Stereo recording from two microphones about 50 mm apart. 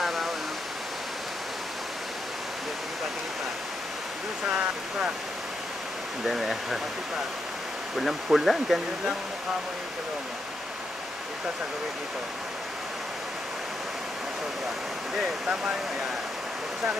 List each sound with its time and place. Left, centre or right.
0.0 s waterfall: centre
6.2 s speech: centre
7.9 s speech: centre
15.4 s speech: centre